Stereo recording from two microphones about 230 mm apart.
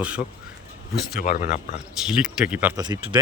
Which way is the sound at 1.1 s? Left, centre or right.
Left.